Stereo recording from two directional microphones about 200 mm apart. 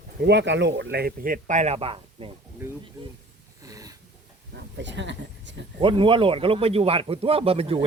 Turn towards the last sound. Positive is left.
turn(degrees=-30)  # may be behind; listen again after turning